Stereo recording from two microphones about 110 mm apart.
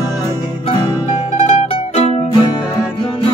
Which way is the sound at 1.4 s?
70° left (ahead or behind).